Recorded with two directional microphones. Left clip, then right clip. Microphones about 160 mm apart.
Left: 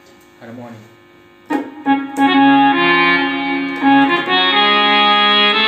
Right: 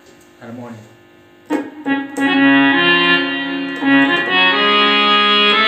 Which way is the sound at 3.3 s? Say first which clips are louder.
Left 2 dB; 25° left (ahead or behind).